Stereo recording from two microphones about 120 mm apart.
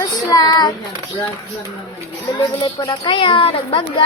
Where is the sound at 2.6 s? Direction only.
40° left (ahead or behind).